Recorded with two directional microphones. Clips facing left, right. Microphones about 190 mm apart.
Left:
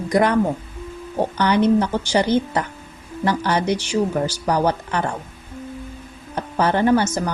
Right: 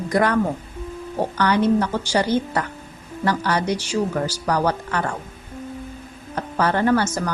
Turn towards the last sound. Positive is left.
turn(degrees=20)  # may be behind; listen again after turning